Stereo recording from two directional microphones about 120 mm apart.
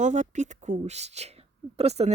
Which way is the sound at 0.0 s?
85° right.